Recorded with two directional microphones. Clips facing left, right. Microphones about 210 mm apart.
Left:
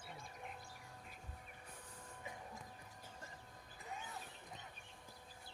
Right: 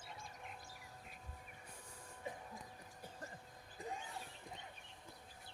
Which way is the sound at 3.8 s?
30° right (ahead or behind).